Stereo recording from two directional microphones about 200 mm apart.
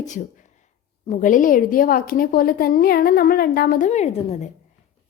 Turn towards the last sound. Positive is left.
turn(degrees=35)  # may be behind; listen again after turning